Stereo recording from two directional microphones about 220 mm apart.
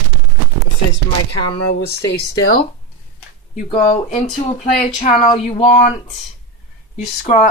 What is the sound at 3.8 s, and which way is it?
Speech, 35° left (ahead or behind).